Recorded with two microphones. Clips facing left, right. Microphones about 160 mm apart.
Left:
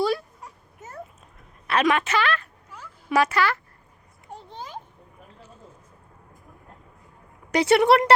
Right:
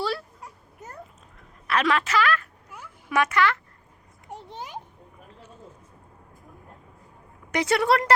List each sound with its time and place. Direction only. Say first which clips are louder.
0.4 s cat: even; 5° left (ahead or behind)
1.6 s a woman's voice: left 2 dB; 20° left (ahead or behind)
4.3 s a sound: right 1 dB; 15° right (ahead or behind)
7.5 s a woman's voice: left 5 dB; 30° left (ahead or behind)